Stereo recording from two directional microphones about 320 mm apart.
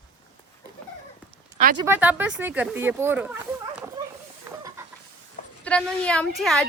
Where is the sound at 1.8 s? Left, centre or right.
Centre.